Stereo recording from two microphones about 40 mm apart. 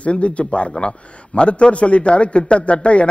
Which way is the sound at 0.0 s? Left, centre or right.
Left.